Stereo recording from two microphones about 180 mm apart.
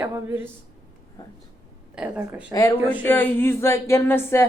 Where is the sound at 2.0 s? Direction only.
5° right (ahead or behind).